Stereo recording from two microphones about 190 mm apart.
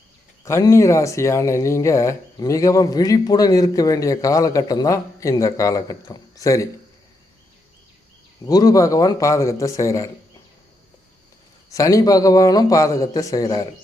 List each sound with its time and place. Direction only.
0.4 s speech: 15° left (ahead or behind)
8.4 s speech: 20° left (ahead or behind)
11.7 s speech: 15° left (ahead or behind)